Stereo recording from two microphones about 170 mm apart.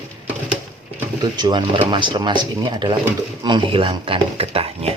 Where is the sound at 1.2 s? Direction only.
25° right (ahead or behind).